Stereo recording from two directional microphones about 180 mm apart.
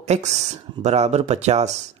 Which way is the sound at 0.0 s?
40° right (ahead or behind).